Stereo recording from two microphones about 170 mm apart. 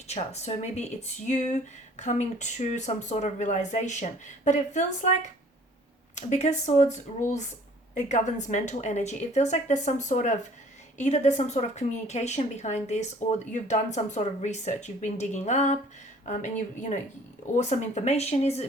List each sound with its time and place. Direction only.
0.1 s speech: 40° left (ahead or behind)